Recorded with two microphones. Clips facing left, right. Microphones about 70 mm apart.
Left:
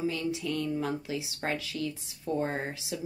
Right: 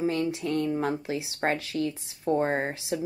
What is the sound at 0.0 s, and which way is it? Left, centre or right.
Speech, right.